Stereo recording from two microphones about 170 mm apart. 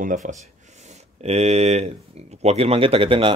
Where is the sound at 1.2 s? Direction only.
40° right (ahead or behind).